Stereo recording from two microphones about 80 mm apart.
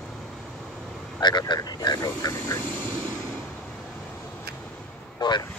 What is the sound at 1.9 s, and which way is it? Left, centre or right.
Speech, left.